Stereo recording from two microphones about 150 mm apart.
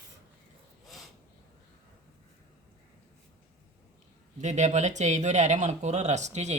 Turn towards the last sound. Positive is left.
turn(degrees=-50)  # may be behind; listen again after turning